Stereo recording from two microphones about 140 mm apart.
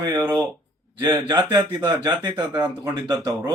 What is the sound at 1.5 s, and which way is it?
Speech, 30° right (ahead or behind).